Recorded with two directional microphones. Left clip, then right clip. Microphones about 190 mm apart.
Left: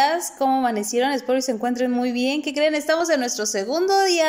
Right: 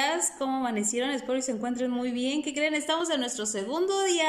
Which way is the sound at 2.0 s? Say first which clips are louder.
Left 7 dB; 50° left (ahead or behind).